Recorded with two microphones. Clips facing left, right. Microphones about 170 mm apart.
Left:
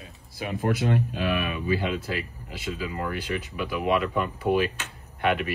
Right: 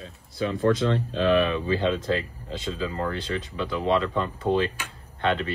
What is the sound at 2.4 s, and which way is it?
Speech, 30° right (ahead or behind).